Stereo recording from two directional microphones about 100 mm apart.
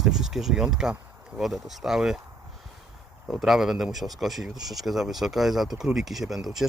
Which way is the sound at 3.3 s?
5° right (ahead or behind).